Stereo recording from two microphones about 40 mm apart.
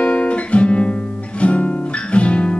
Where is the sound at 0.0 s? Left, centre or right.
Left.